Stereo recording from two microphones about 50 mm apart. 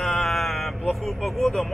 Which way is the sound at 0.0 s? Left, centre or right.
Centre.